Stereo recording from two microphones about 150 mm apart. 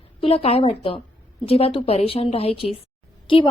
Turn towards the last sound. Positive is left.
turn(degrees=35)  # may be behind; listen again after turning